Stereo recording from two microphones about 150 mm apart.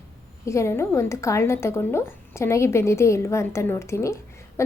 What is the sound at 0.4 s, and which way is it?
A woman's voice, 20° left (ahead or behind).